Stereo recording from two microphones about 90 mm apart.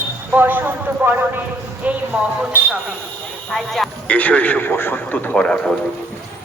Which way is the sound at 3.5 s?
Centre (ahead or behind).